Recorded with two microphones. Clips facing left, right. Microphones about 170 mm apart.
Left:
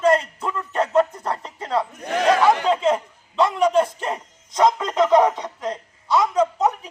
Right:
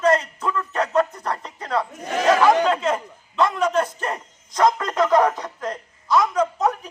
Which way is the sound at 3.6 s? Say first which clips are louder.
Left 3 dB; 5° left (ahead or behind).